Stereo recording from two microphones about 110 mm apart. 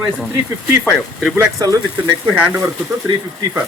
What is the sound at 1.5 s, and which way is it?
Speech, 30° right (ahead or behind).